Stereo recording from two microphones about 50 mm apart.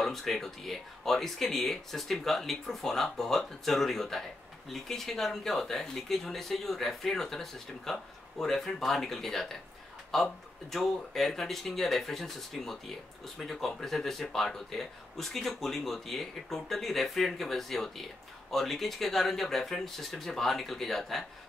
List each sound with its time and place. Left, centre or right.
0.0 s speech: centre